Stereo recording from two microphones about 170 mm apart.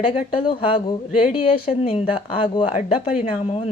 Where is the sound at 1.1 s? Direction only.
40° left (ahead or behind).